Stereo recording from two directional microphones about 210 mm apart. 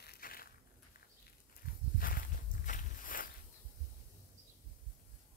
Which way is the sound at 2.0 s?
45° left (ahead or behind).